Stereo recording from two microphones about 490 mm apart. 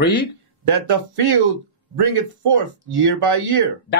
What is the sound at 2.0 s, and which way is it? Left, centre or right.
Speech, right.